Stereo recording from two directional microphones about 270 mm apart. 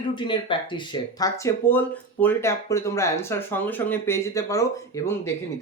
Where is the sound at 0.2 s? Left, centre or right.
Centre.